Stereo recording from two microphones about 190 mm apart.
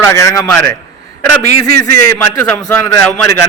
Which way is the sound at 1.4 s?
60° right (ahead or behind).